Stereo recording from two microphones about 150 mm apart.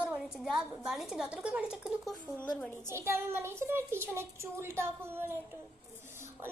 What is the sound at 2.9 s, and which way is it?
A child's voice, 15° right (ahead or behind).